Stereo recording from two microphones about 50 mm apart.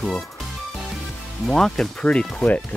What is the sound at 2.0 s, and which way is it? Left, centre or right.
Speech, left.